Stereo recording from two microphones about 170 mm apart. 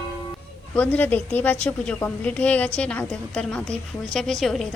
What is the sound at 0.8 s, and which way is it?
A woman's voice, 10° left (ahead or behind).